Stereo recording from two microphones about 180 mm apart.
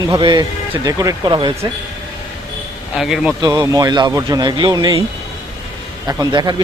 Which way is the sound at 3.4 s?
20° right (ahead or behind).